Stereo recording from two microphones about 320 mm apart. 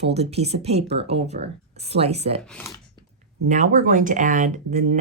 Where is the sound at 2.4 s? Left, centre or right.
Centre.